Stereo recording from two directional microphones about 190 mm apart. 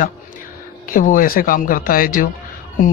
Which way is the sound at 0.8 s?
45° left (ahead or behind).